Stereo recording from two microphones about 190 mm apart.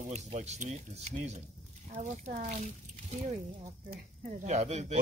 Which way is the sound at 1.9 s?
45° right (ahead or behind).